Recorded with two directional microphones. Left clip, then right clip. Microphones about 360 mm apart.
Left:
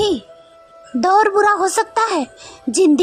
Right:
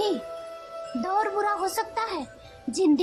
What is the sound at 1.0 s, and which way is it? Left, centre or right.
A woman's voice, centre.